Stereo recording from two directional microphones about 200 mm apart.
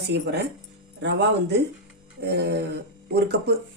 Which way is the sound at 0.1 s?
60° right (ahead or behind).